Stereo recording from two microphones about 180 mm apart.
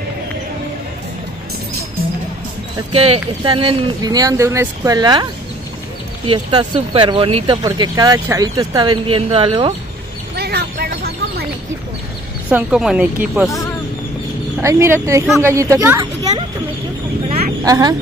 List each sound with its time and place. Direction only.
2.9 s speech: 35° right (ahead or behind)
10.3 s a sound: 65° right (ahead or behind)
12.4 s speech: 5° right (ahead or behind)
14.6 s a woman's voice: 15° right (ahead or behind)
16.0 s a sound: 25° right (ahead or behind)
17.6 s speech: 20° right (ahead or behind)